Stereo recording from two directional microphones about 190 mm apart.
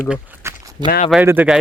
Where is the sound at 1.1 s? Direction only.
10° right (ahead or behind).